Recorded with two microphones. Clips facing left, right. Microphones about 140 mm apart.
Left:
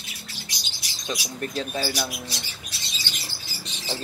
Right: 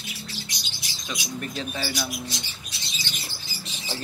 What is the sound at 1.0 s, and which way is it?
Speech, 40° left (ahead or behind).